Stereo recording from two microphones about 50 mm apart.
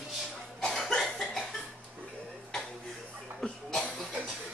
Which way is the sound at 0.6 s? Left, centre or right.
Centre.